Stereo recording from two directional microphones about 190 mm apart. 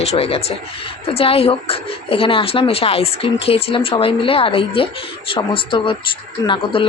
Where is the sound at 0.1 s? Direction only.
30° left (ahead or behind).